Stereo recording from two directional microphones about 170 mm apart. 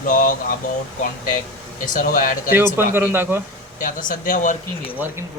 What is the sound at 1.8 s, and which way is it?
Speech, 50° left (ahead or behind).